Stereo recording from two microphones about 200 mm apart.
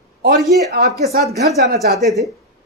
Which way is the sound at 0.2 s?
50° right (ahead or behind).